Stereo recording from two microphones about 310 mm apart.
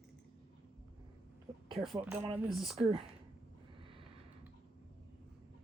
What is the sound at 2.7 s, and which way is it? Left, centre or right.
Speech, centre.